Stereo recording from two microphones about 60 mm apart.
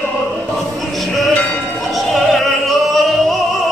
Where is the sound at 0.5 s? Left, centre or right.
Centre.